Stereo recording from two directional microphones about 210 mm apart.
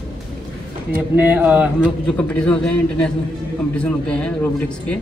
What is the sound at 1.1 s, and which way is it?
Speech, 10° right (ahead or behind).